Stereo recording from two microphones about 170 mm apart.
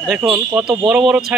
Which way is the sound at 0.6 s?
30° right (ahead or behind).